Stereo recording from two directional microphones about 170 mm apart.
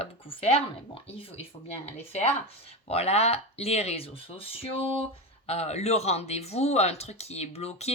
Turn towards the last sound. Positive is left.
turn(degrees=40)  # may be behind; listen again after turning